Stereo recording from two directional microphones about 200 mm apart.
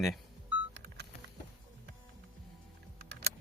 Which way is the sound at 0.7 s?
55° right (ahead or behind).